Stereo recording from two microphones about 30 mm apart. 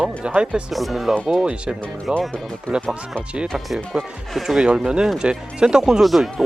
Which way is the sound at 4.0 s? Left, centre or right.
Centre.